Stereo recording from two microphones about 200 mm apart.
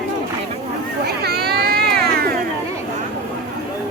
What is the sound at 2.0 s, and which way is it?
Cat, 50° right (ahead or behind).